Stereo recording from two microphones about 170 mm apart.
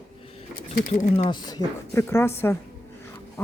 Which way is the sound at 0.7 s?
50° left (ahead or behind).